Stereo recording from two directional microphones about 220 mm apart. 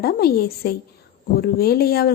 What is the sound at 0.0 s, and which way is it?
Speech, 45° left (ahead or behind).